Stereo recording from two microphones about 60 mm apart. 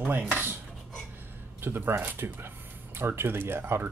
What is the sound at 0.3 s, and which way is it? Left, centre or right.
Cutlery, right.